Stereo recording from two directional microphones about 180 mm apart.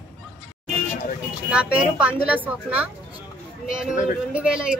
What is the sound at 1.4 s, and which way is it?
A woman's voice, 5° right (ahead or behind).